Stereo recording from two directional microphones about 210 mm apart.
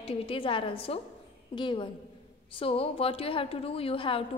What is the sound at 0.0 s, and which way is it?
A woman's voice, 25° left (ahead or behind).